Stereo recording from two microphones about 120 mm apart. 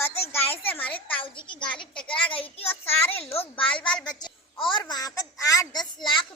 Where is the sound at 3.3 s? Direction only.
55° left (ahead or behind).